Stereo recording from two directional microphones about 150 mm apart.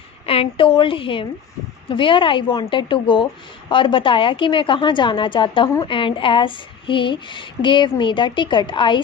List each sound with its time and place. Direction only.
0.3 s a woman's voice: 35° left (ahead or behind)